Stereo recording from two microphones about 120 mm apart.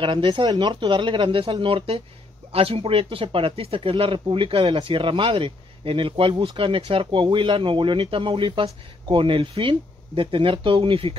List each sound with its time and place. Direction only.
0.0 s speech: 40° right (ahead or behind)